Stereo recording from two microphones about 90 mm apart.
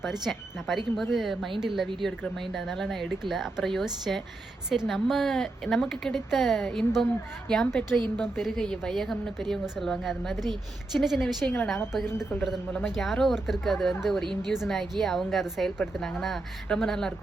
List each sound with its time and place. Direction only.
0.0 s a woman's voice: centre (ahead or behind)
10.4 s a woman's voice: 55° right (ahead or behind)
11.0 s a woman's voice: 5° right (ahead or behind)
12.0 s a woman's voice: 25° left (ahead or behind)
13.0 s a woman's voice: centre (ahead or behind)